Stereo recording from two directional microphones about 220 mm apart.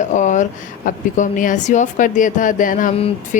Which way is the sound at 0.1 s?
35° left (ahead or behind).